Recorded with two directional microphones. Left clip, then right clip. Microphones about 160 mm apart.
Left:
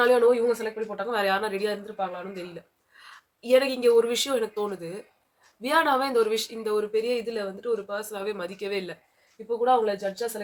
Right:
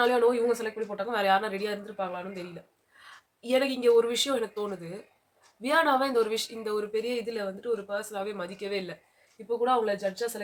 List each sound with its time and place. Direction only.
0.0 s a woman's voice: 10° left (ahead or behind)
3.0 s a woman's voice: 10° left (ahead or behind)